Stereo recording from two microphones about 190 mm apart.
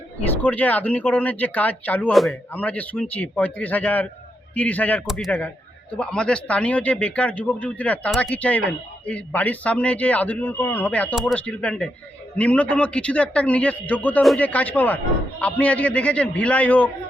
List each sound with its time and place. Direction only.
0.4 s a man's voice: 10° left (ahead or behind)
11.1 s a man's voice: centre (ahead or behind)